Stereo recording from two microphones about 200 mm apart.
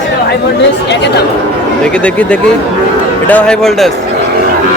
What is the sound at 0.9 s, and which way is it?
Speech, 60° left (ahead or behind).